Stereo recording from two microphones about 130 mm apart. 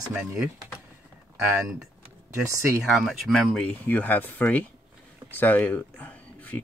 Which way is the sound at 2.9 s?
Centre (ahead or behind).